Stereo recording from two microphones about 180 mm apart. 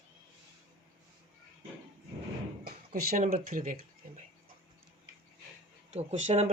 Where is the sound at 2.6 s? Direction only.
55° right (ahead or behind).